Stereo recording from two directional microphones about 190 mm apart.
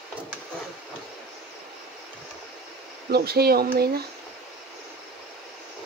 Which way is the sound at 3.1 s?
55° right (ahead or behind).